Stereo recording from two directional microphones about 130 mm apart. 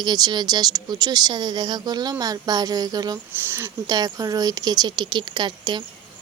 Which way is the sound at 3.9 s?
30° right (ahead or behind).